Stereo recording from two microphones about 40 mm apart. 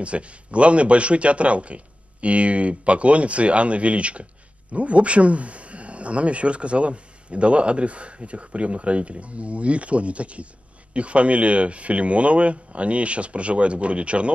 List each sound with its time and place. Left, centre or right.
0.0 s speech: right